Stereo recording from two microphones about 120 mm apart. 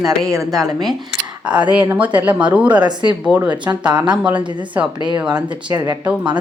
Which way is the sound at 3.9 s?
35° right (ahead or behind).